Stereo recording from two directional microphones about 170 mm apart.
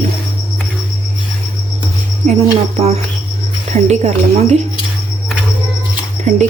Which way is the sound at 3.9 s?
40° right (ahead or behind).